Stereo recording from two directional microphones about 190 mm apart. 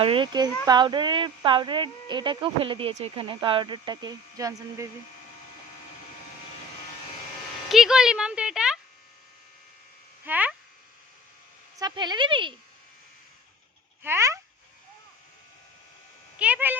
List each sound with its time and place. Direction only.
0.0 s speech: 25° right (ahead or behind)
7.7 s speech: centre (ahead or behind)
10.2 s speech: 10° right (ahead or behind)
11.8 s speech: 20° right (ahead or behind)
14.0 s speech: 15° right (ahead or behind)
16.4 s speech: 10° right (ahead or behind)